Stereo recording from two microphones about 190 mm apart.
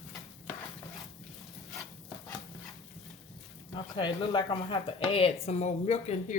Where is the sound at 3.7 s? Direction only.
25° left (ahead or behind).